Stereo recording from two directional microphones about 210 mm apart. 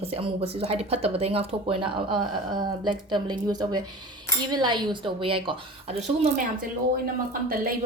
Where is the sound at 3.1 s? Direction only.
20° right (ahead or behind).